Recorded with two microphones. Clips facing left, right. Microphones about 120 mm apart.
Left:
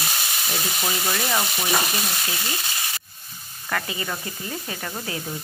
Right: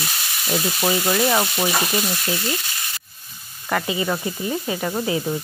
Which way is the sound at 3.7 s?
20° right (ahead or behind).